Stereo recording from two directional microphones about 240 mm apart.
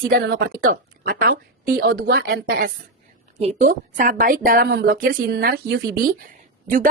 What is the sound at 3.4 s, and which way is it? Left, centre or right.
A woman's voice, right.